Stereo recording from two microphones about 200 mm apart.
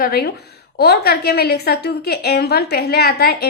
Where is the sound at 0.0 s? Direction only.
50° left (ahead or behind).